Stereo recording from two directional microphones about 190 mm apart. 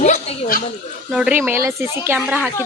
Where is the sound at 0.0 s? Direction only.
40° left (ahead or behind).